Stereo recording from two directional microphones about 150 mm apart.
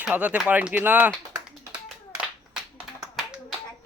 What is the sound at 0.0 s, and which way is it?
Speech, 10° right (ahead or behind).